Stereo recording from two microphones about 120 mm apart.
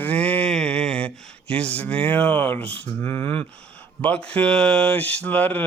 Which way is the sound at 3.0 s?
20° left (ahead or behind).